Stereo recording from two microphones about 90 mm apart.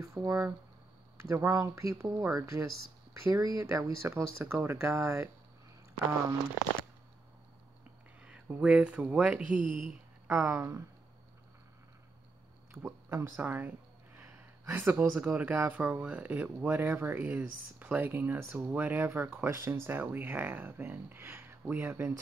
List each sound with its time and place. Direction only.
0.0 s speech: 40° right (ahead or behind)
8.2 s speech: 15° right (ahead or behind)
12.7 s speech: 40° right (ahead or behind)
13.1 s a sound: 25° right (ahead or behind)
14.7 s speech: 20° right (ahead or behind)
18.7 s speech: 20° right (ahead or behind)